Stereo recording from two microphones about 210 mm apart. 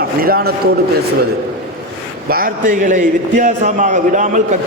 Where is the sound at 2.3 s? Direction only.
40° right (ahead or behind).